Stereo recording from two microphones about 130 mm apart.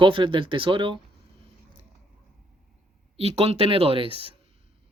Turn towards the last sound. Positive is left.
turn(degrees=-45)  # may be behind; listen again after turning